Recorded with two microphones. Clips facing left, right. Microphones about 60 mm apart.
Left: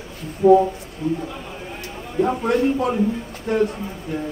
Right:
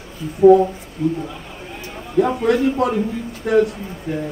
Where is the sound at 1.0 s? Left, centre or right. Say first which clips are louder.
Right 3 dB; right.